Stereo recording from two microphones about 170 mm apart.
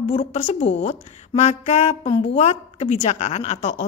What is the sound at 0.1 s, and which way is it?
A woman's voice, 40° left (ahead or behind).